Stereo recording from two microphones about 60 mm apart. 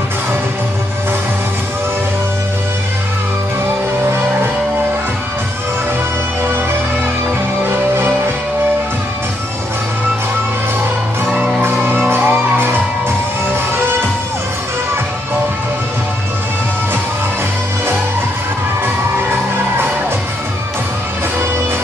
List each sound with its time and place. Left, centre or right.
7.6 s music: right
11.2 s music: centre
11.6 s music: right